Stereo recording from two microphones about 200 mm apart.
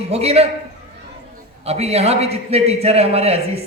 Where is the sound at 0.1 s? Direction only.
30° right (ahead or behind).